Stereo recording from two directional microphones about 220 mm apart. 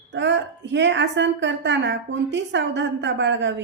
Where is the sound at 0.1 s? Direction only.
55° right (ahead or behind).